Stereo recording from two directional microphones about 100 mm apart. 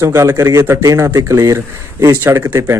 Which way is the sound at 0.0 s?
30° right (ahead or behind).